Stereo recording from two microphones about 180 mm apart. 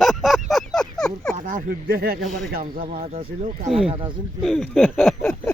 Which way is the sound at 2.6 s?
55° right (ahead or behind).